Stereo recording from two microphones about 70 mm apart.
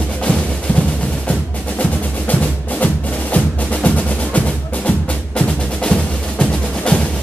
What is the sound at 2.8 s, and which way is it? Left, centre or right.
Music, left.